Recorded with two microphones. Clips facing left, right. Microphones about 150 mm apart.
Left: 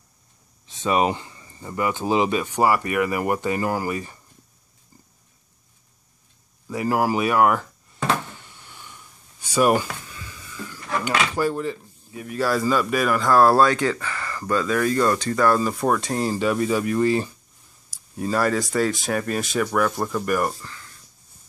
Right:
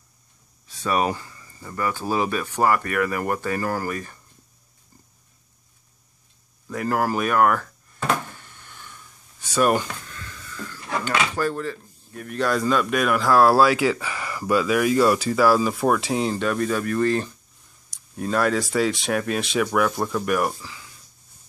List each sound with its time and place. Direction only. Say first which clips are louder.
0.7 s speech: left 2 dB; 20° left (ahead or behind)
6.7 s speech: left 2 dB; 10° left (ahead or behind)
8.5 s a sound: even; 15° left (ahead or behind)
12.1 s speech: even; 5° left (ahead or behind)